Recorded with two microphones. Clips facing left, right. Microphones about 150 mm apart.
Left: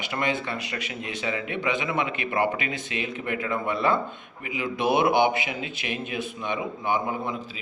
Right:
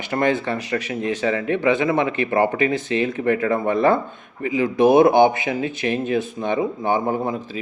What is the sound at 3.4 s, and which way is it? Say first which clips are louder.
Speech: right 7 dB; 45° right (ahead or behind).